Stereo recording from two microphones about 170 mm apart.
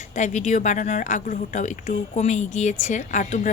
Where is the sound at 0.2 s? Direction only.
45° left (ahead or behind).